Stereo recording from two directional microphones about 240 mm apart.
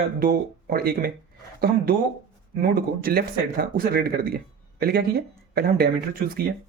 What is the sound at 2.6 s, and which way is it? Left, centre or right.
A man's voice, right.